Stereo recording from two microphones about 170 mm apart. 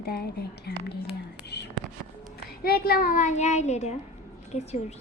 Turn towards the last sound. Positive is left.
turn(degrees=40)  # may be behind; listen again after turning